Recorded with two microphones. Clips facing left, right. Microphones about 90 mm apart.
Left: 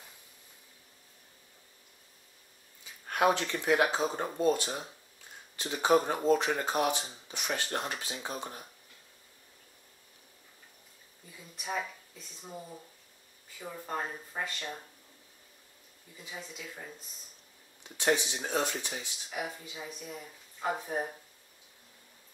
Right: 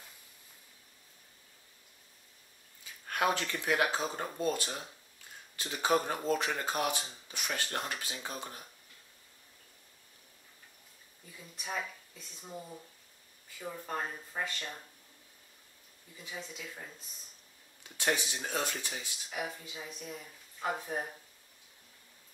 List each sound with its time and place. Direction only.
3.1 s speech: 20° left (ahead or behind)
11.3 s speech: 5° left (ahead or behind)
16.2 s speech: 5° left (ahead or behind)
17.8 s speech: 20° left (ahead or behind)
18.9 s speech: 5° left (ahead or behind)